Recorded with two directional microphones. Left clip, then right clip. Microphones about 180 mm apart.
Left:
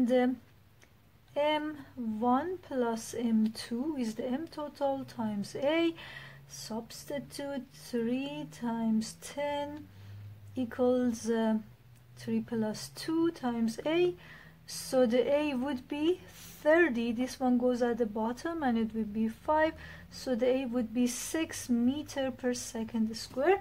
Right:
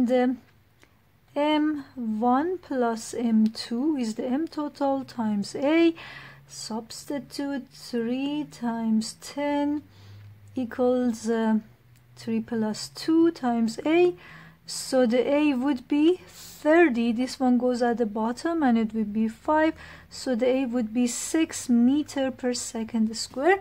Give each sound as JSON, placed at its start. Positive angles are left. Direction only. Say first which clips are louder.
{"t": 0.0, "sound": "speech", "louder": "right 5 dB", "side_deg": -50}
{"t": 1.3, "sound": "speech", "louder": "right 6 dB", "side_deg": -45}